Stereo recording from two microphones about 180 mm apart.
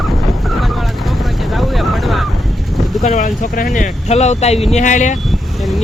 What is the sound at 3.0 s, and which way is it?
Speech, 40° left (ahead or behind).